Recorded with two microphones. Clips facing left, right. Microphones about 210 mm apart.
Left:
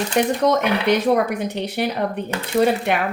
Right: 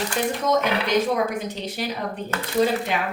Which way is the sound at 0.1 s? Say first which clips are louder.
Left 6 dB; 65° left (ahead or behind).